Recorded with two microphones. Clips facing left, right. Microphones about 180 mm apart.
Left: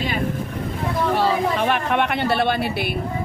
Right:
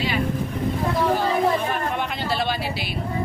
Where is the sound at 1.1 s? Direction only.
75° left (ahead or behind); by 3.0 s 55° left (ahead or behind).